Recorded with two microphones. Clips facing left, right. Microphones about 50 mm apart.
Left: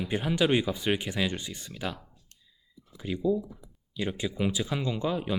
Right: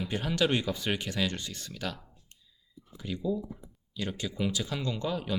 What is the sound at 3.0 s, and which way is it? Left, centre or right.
Speech, centre.